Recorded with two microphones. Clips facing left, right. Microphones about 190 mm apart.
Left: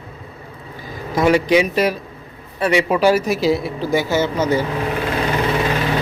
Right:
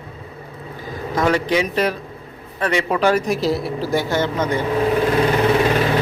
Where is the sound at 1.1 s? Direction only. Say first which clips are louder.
Left 4 dB; 10° left (ahead or behind).